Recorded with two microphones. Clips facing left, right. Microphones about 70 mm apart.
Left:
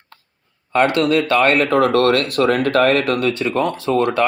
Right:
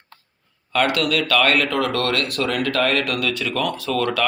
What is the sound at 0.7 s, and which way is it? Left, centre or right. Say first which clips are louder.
Speech: left 5 dB; left.